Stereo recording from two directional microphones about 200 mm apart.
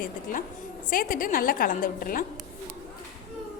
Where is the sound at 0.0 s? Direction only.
40° left (ahead or behind).